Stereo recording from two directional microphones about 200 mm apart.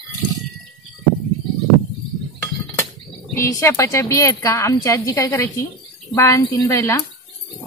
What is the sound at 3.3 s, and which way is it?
Speech, 15° left (ahead or behind).